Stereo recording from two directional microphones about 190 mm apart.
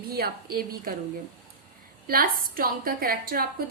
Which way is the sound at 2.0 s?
50° right (ahead or behind).